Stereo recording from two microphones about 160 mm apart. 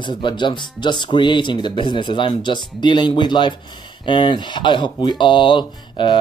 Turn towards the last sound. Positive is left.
turn(degrees=30)  # may be behind; listen again after turning